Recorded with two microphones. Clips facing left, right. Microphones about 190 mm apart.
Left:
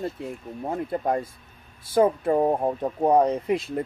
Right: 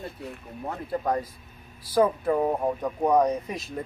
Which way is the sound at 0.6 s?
25° left (ahead or behind).